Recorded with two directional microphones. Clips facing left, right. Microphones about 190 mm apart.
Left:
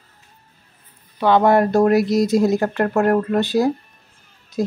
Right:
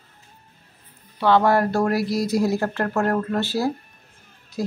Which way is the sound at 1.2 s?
20° left (ahead or behind).